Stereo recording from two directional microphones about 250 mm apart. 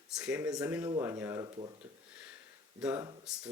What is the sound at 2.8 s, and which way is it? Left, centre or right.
Speech, centre.